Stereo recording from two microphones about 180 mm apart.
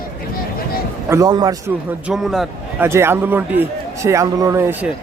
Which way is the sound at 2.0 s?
Centre (ahead or behind).